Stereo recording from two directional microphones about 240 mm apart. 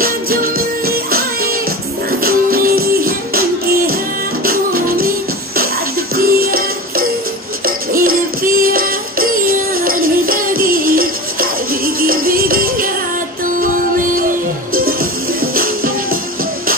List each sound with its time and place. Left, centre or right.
0.0 s music: right
4.5 s music: right
6.1 s music: right
7.6 s music: right
9.3 s music: right
11.8 s music: right